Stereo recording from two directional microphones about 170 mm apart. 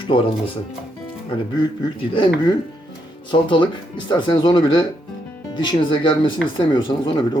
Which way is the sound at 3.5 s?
30° left (ahead or behind).